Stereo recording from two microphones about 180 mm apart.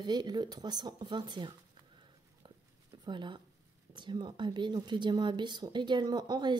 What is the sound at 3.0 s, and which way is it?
Speech, 25° right (ahead or behind).